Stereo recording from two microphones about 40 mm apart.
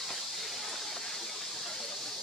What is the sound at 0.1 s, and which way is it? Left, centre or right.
Hiss, centre.